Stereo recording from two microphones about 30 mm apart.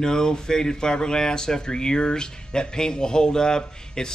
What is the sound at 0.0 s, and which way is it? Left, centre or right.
Speech, left.